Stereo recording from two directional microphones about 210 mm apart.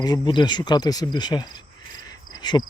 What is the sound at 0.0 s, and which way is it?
Speech, 20° left (ahead or behind).